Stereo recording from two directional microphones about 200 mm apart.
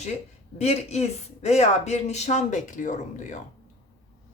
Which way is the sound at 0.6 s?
35° left (ahead or behind).